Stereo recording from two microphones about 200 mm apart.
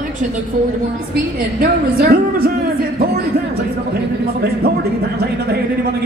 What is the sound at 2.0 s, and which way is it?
Speech, 50° right (ahead or behind).